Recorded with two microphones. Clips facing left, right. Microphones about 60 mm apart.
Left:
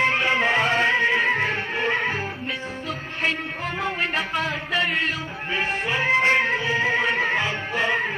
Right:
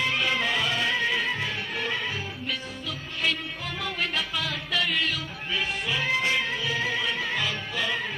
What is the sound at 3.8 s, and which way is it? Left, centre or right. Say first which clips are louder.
Music: left 4 dB; left.